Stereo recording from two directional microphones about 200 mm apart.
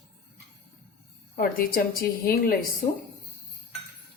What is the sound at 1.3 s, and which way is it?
A woman's voice, 45° left (ahead or behind).